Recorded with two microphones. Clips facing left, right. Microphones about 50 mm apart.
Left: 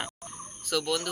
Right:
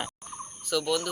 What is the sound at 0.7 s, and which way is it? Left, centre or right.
Fowl, left.